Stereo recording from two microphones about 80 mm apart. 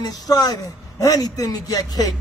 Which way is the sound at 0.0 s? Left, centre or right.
Left.